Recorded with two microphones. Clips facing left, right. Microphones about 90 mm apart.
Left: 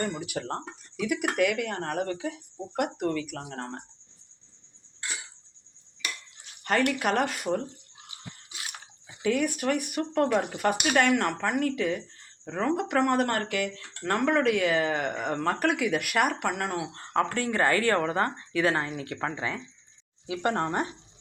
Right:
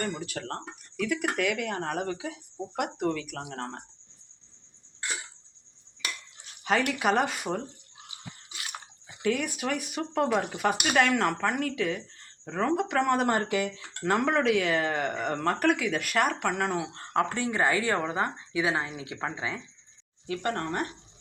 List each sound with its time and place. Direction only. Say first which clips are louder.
0.0 s speech: left 2 dB; 10° left (ahead or behind)
1.4 s speech: left 2 dB; centre (ahead or behind)
6.7 s speech: even; 5° right (ahead or behind)
9.2 s speech: left 3 dB; centre (ahead or behind)
13.2 s speech: right 2 dB; 15° right (ahead or behind)
13.7 s speech: right 2 dB; 5° right (ahead or behind)
17.2 s speech: left 1 dB; 15° right (ahead or behind)
20.2 s speech: left 3 dB; 15° left (ahead or behind)